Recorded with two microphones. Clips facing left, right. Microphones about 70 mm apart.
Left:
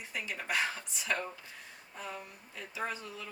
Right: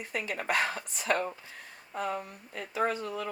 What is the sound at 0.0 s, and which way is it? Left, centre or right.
Speech, right.